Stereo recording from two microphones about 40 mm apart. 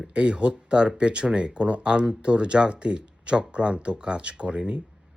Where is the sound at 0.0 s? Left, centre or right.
Right.